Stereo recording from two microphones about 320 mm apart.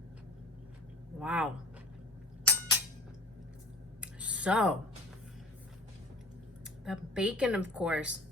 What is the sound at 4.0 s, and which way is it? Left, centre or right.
Typing, centre.